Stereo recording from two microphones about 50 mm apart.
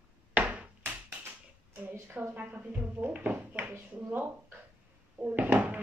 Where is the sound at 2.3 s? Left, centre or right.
Right.